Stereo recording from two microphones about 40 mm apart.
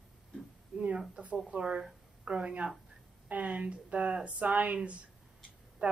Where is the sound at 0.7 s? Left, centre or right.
Right.